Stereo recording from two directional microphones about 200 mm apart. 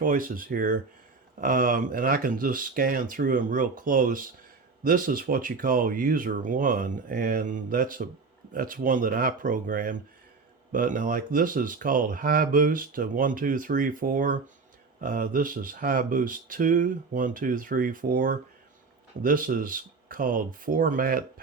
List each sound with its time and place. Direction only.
0.0 s speech: 45° right (ahead or behind)